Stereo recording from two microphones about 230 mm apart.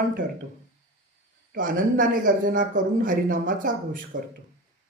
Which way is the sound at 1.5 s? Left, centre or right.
Right.